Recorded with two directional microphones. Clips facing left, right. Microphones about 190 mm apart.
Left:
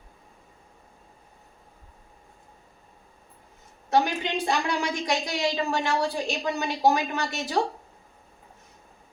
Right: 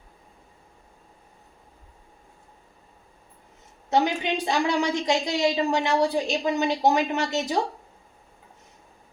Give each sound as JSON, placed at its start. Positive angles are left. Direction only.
{"t": 3.8, "sound": "a woman's voice", "side_deg": -20}